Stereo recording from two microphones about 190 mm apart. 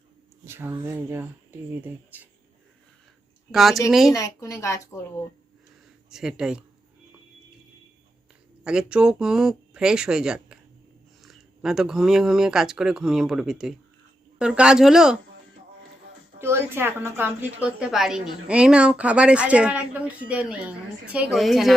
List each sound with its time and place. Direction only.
0.4 s a woman's voice: 10° right (ahead or behind)
3.5 s speech: centre (ahead or behind)
4.1 s a woman's voice: 15° left (ahead or behind)
6.1 s speech: 5° right (ahead or behind)
8.6 s speech: 5° right (ahead or behind)
16.4 s a woman's voice: 15° right (ahead or behind)